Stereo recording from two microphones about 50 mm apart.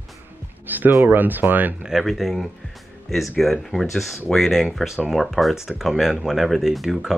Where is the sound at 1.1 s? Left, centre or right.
Right.